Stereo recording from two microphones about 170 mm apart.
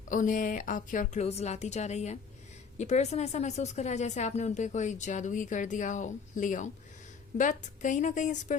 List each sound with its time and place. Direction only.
0.1 s a woman's voice: 50° left (ahead or behind)